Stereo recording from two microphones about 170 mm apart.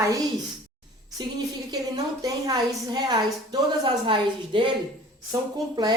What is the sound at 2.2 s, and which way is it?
A woman's voice, 20° right (ahead or behind).